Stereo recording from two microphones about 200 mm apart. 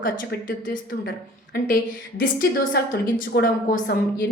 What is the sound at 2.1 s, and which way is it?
A woman's voice, 45° left (ahead or behind).